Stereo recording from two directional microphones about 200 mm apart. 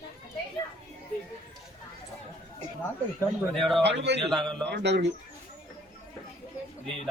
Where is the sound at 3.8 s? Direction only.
60° right (ahead or behind).